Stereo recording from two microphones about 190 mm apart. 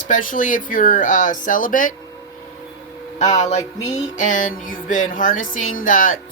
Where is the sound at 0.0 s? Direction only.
45° left (ahead or behind).